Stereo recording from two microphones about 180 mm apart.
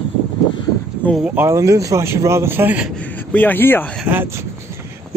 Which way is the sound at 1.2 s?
10° right (ahead or behind).